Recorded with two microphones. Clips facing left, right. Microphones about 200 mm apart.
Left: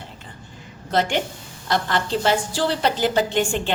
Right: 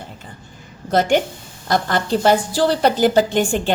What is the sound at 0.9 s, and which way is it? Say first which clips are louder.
A woman's voice: right 5 dB; 45° right (ahead or behind).